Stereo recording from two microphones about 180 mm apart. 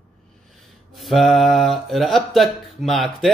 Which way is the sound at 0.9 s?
Centre (ahead or behind).